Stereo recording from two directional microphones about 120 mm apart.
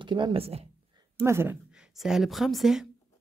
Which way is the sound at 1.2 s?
20° right (ahead or behind).